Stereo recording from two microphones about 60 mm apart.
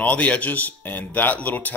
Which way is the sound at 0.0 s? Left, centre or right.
Left.